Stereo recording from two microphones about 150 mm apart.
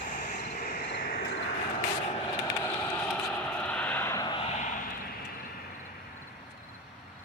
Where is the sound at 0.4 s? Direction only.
85° left.